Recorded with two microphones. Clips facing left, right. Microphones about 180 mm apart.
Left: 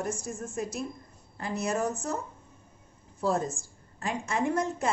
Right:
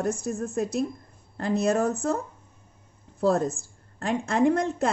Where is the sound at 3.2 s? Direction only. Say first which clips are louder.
Right 5 dB; 65° right (ahead or behind).